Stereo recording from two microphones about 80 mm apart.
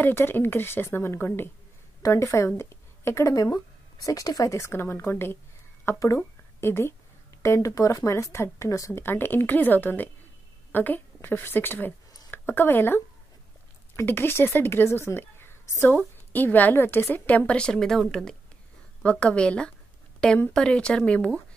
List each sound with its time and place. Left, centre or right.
0.0 s a woman's voice: left
2.0 s speech: left
9.0 s a woman's voice: left; by 18.0 s centre
19.0 s speech: centre